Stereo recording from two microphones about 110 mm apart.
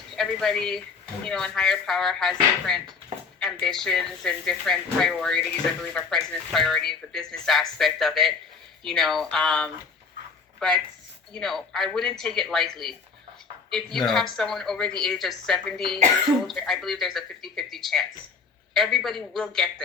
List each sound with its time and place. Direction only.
0.2 s speech: 5° left (ahead or behind)